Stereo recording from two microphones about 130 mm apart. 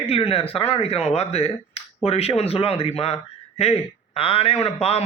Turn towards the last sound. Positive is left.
turn(degrees=55)  # may be behind; listen again after turning